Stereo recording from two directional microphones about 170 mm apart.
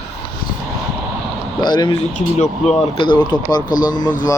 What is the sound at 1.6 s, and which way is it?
Speech, 25° left (ahead or behind).